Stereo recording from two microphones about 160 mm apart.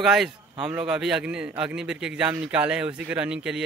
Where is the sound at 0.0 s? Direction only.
5° right (ahead or behind).